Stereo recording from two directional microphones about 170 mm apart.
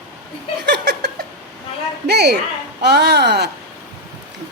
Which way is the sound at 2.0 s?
80° right.